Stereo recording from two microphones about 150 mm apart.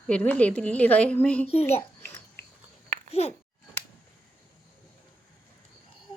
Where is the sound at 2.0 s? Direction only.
15° left (ahead or behind).